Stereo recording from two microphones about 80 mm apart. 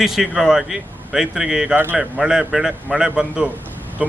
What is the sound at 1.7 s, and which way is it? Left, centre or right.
Speech, right.